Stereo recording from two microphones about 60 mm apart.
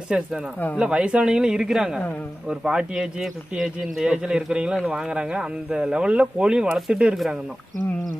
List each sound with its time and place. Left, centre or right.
0.1 s speech: centre